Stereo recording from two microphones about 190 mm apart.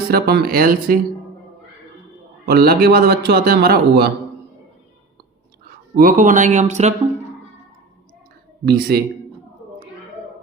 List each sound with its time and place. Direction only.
0.1 s speech: 55° right (ahead or behind)
2.5 s a man's voice: 55° right (ahead or behind)
5.6 s speech: 50° right (ahead or behind)
8.6 s a man's voice: 55° right (ahead or behind)